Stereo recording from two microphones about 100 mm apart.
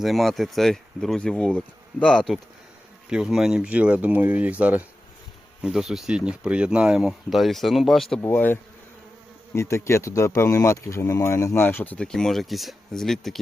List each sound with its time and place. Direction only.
0.0 s speech: centre (ahead or behind)
3.1 s speech: 5° right (ahead or behind)
5.6 s speech: 5° right (ahead or behind)
8.2 s speech: 20° left (ahead or behind)
9.6 s speech: 25° left (ahead or behind); by 13.4 s centre (ahead or behind)